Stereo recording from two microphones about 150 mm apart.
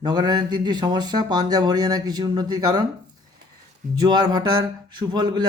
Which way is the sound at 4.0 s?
25° right (ahead or behind).